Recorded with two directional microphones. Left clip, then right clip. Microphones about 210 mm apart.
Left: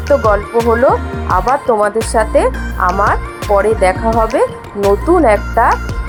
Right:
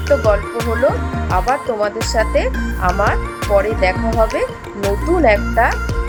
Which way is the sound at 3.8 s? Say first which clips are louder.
Left 4 dB; 15° left (ahead or behind).